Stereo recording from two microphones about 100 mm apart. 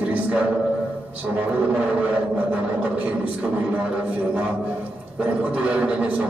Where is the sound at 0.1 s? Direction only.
15° right (ahead or behind).